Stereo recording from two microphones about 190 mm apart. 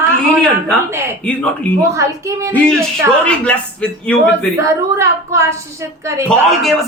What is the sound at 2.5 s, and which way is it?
Speech, 10° left (ahead or behind).